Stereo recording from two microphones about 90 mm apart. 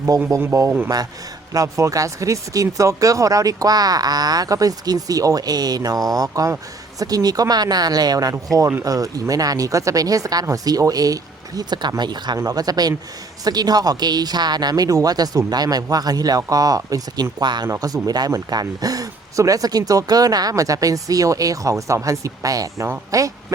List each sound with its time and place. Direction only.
0.1 s speech: 45° right (ahead or behind)
17.4 s speech: 55° right (ahead or behind)
17.7 s speech: 45° right (ahead or behind)